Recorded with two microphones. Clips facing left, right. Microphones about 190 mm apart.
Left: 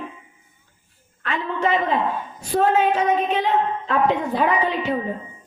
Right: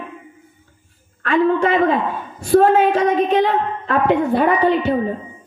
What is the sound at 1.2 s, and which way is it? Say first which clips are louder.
Speech: right 8 dB; 55° right (ahead or behind).